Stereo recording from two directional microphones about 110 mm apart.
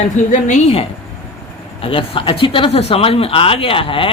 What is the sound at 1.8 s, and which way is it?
Speech, 55° left (ahead or behind).